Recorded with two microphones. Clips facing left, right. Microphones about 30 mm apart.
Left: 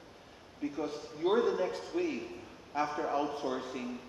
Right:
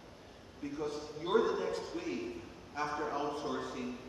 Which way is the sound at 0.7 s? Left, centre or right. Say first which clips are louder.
Left 1 dB; left.